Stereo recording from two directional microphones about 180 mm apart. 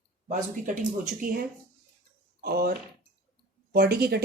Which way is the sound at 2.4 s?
60° right (ahead or behind).